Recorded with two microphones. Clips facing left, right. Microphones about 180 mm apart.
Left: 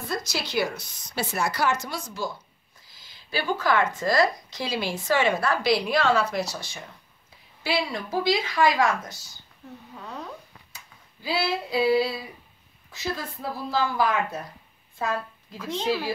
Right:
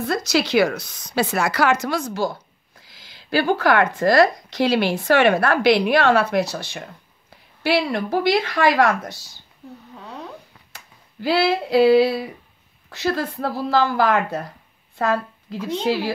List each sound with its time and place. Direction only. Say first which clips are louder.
0.0 s speech: right 10 dB; 75° right (ahead or behind)
10.7 s speech: right 3 dB; 75° right (ahead or behind)